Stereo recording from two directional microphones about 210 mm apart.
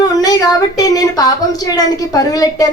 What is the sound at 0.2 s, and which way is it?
Speech, 15° left (ahead or behind).